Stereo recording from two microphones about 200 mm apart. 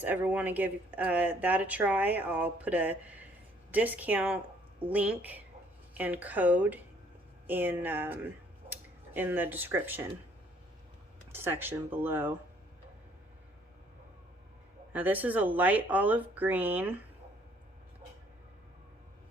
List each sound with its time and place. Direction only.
0.0 s speech: 10° right (ahead or behind)
11.3 s speech: 10° right (ahead or behind)
14.9 s speech: 10° right (ahead or behind)